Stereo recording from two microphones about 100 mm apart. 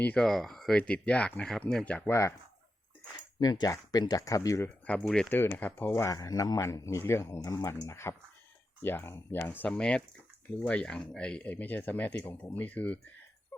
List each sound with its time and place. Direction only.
0.0 s speech: 15° left (ahead or behind)
0.3 s speech: centre (ahead or behind)
2.0 s speech: 30° left (ahead or behind)
3.4 s speech: 45° left (ahead or behind)
4.9 s speech: 10° left (ahead or behind)
5.3 s speech: 20° left (ahead or behind)
9.6 s speech: 10° left (ahead or behind)